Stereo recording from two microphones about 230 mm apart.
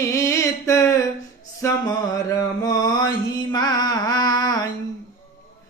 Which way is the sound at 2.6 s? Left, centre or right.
Centre.